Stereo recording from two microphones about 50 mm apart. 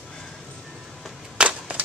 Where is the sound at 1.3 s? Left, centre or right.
Right.